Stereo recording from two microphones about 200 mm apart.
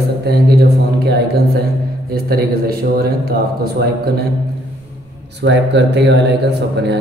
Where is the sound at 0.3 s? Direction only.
50° right (ahead or behind).